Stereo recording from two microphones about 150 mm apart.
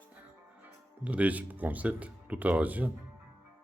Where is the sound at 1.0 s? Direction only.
10° right (ahead or behind).